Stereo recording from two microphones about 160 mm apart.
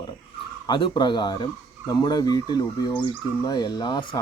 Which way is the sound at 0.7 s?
30° left (ahead or behind).